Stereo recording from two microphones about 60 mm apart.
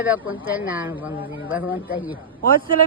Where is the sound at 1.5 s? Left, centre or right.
Right.